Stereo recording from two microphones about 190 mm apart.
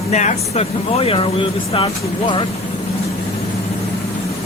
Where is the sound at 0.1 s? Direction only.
40° left (ahead or behind).